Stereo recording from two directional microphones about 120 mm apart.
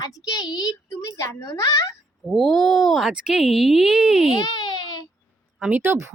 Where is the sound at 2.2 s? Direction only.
Centre (ahead or behind).